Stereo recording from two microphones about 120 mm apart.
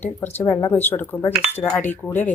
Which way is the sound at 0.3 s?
15° left (ahead or behind).